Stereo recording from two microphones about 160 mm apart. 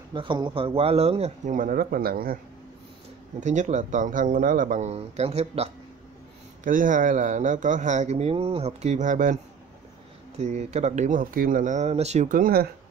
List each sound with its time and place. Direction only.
0.1 s speech: 30° right (ahead or behind); by 2.3 s 65° right (ahead or behind)
3.3 s speech: 50° right (ahead or behind)
6.6 s speech: 55° right (ahead or behind)